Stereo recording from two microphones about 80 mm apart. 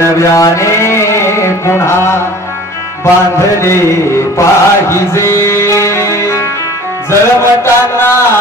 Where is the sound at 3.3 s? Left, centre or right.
Left.